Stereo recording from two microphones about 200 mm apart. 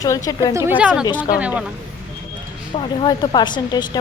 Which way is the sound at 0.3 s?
20° left (ahead or behind).